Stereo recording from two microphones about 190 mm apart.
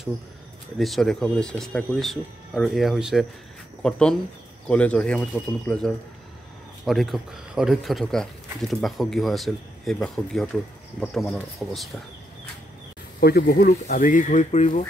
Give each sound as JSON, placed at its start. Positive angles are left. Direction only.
{"t": 0.7, "sound": "speech", "side_deg": 0}
{"t": 13.2, "sound": "speech", "side_deg": 55}